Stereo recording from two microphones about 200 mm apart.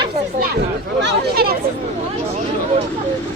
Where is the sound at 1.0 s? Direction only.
50° right (ahead or behind).